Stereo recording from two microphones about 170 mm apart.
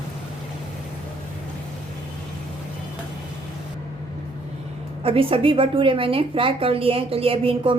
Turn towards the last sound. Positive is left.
turn(degrees=-35)  # may be behind; listen again after turning